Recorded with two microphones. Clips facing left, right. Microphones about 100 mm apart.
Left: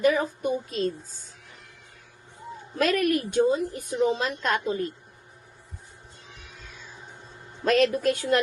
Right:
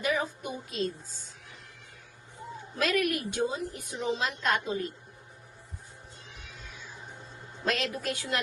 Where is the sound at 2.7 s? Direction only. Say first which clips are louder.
Left 5 dB; 45° left (ahead or behind).